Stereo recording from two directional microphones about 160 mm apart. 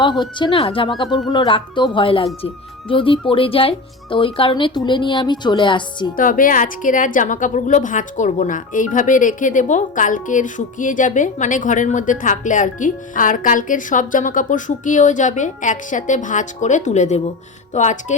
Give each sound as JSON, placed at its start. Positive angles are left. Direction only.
{"t": 0.0, "sound": "speech", "side_deg": 30}
{"t": 6.1, "sound": "a woman's voice", "side_deg": 60}